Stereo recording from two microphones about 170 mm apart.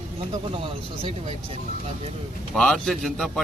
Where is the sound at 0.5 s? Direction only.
35° right (ahead or behind).